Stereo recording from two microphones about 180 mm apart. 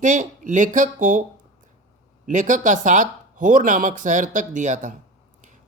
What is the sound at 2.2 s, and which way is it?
Speech, 45° right (ahead or behind).